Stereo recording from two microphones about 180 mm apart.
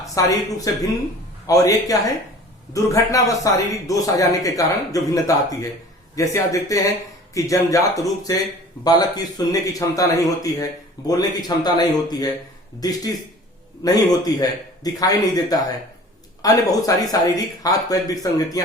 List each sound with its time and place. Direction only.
0.1 s a man's voice: 20° left (ahead or behind)